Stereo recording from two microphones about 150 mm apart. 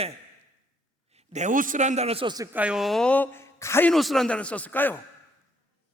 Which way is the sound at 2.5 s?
5° right (ahead or behind).